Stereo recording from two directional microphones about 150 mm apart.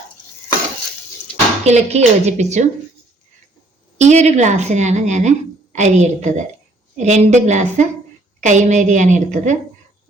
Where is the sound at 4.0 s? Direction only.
50° right (ahead or behind).